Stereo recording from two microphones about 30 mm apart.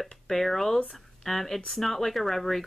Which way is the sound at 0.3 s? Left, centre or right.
Centre.